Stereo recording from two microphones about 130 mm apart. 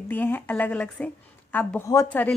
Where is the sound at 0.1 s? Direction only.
15° left (ahead or behind).